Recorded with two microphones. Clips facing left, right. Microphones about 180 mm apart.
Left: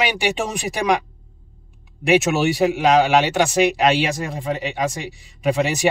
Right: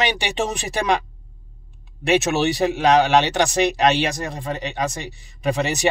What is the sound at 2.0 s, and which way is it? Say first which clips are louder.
Speech: left 2 dB; 10° left (ahead or behind).